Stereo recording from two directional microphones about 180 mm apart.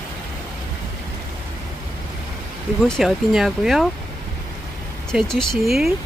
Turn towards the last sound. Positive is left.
turn(degrees=0)  # may be behind; listen again after turning